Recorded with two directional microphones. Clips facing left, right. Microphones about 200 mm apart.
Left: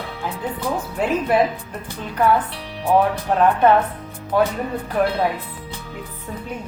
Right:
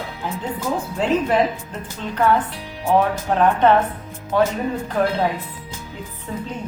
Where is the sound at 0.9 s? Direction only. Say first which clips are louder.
Even; 10° left (ahead or behind).